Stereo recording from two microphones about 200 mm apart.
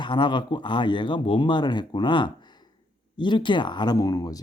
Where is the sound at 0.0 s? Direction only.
25° left (ahead or behind).